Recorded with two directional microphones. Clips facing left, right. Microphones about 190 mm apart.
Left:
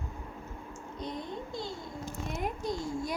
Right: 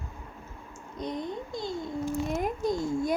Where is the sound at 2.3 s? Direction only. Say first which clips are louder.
Right 5 dB; 50° right (ahead or behind).